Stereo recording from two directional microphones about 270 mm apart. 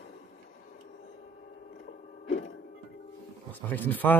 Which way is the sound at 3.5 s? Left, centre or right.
Centre.